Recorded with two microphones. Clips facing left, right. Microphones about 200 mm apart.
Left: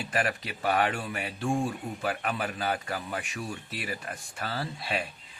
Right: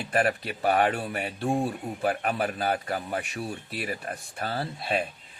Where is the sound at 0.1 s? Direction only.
35° right (ahead or behind).